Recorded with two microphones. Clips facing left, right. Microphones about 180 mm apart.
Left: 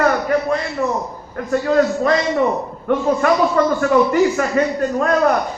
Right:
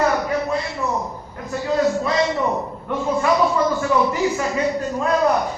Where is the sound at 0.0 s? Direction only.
65° left (ahead or behind).